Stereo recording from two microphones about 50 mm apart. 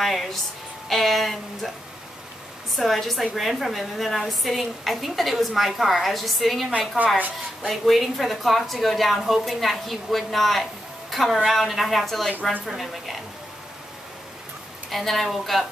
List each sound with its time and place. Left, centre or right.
0.0 s a woman's voice: centre
2.7 s a woman's voice: centre
7.0 s speech: right
7.6 s a woman's voice: centre
14.9 s a woman's voice: centre